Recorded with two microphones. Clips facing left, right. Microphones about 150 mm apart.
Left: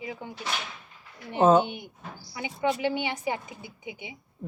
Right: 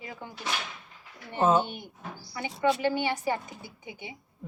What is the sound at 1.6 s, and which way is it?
A woman's voice, 15° left (ahead or behind).